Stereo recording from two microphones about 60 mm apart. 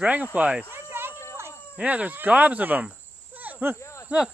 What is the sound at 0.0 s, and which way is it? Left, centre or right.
Speech, right.